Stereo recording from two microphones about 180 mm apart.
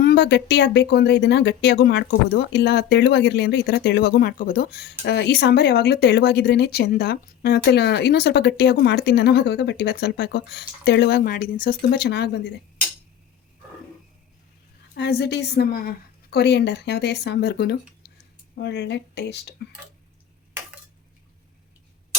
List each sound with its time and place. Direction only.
0.0 s speech: 65° left (ahead or behind)
14.9 s speech: 65° left (ahead or behind)